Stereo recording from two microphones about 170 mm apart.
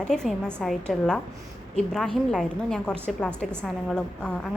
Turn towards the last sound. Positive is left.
turn(degrees=5)  # may be behind; listen again after turning